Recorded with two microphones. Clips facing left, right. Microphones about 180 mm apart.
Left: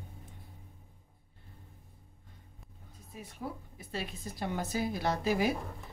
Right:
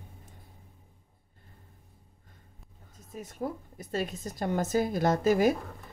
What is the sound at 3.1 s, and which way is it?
A woman's voice, 45° right (ahead or behind).